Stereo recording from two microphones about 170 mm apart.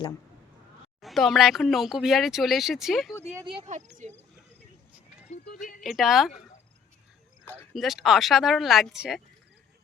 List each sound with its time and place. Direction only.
1.0 s speech: centre (ahead or behind)
3.4 s speech: 30° right (ahead or behind)
5.8 s speech: centre (ahead or behind)
7.7 s speech: centre (ahead or behind)